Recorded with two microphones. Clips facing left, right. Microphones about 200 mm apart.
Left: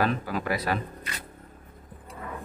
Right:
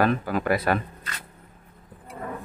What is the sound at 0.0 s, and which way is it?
Speech, 55° right (ahead or behind).